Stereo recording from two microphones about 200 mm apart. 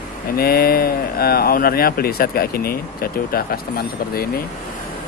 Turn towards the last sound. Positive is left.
turn(degrees=50)  # may be behind; listen again after turning